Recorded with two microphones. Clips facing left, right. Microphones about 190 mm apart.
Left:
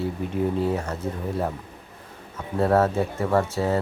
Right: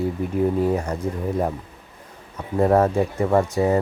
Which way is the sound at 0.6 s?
10° right (ahead or behind).